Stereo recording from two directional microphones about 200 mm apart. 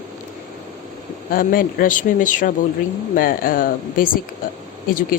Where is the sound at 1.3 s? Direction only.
45° left (ahead or behind).